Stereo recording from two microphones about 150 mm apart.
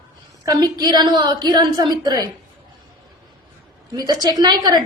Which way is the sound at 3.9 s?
25° right (ahead or behind).